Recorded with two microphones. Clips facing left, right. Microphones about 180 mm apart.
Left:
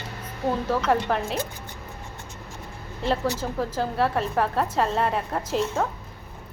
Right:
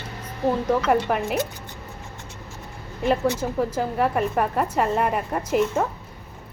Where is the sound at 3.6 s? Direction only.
10° right (ahead or behind).